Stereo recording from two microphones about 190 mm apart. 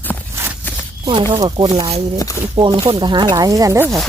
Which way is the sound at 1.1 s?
25° right (ahead or behind).